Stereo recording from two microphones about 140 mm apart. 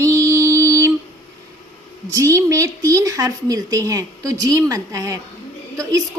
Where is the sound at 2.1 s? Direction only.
20° right (ahead or behind).